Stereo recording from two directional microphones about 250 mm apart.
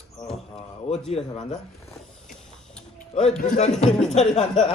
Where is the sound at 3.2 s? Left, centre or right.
Left.